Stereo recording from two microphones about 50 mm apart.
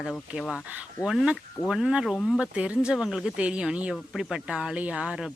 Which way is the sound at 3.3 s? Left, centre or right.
Right.